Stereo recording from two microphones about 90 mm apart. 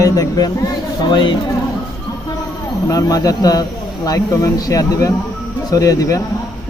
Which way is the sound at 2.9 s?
40° left (ahead or behind).